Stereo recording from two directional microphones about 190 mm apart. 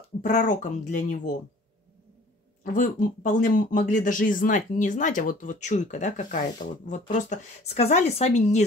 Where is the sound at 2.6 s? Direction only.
40° left (ahead or behind).